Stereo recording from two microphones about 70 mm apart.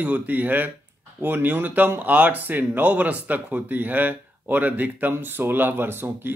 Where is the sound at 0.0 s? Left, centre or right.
Right.